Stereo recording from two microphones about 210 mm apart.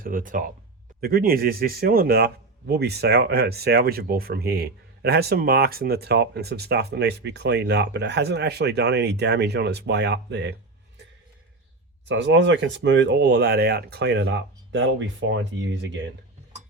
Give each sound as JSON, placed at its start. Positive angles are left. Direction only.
{"t": 0.0, "sound": "a man's voice", "side_deg": -40}
{"t": 12.0, "sound": "speech", "side_deg": -60}